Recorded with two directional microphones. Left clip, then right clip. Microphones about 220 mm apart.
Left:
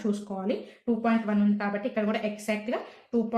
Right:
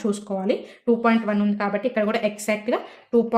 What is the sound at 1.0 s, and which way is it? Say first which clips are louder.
A woman's voice: right 6 dB; 55° right (ahead or behind).